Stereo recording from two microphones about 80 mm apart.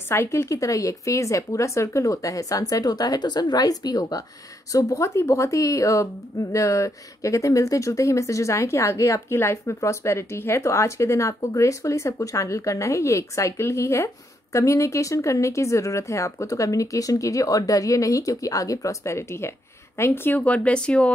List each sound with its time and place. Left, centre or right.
0.1 s speech: left
20.3 s speech: centre